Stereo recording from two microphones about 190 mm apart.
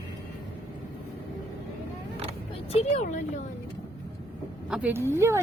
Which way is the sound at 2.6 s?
35° left (ahead or behind).